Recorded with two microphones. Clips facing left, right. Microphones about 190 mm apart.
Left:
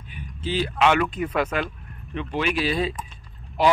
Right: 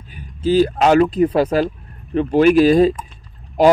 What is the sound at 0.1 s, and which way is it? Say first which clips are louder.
A man's voice: right 12 dB; 40° right (ahead or behind).